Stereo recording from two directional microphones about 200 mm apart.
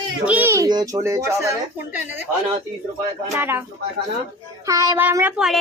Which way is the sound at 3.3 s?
10° right (ahead or behind).